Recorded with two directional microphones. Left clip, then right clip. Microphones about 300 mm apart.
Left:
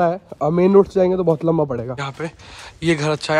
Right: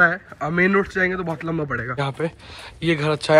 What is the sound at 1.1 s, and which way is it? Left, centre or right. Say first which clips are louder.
Speech: left 8 dB; right.